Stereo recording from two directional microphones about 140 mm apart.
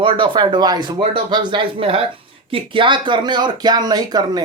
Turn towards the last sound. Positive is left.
turn(degrees=-30)  # may be behind; listen again after turning